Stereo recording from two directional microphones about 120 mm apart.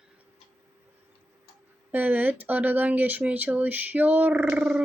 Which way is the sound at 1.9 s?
15° right (ahead or behind).